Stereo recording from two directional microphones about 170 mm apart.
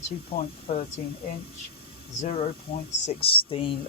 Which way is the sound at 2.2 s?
40° left (ahead or behind).